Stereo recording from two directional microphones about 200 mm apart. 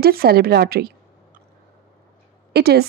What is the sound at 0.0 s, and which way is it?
Speech, 50° right (ahead or behind).